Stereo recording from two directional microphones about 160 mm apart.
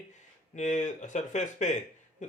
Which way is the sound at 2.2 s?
50° left (ahead or behind).